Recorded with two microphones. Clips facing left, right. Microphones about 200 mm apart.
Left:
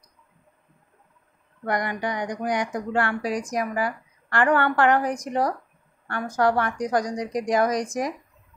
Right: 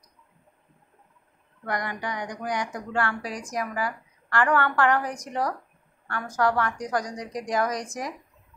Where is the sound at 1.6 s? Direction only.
20° left (ahead or behind).